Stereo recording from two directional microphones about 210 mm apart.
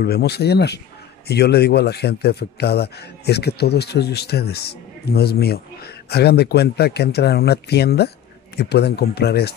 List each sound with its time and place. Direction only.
0.0 s speech: 50° left (ahead or behind)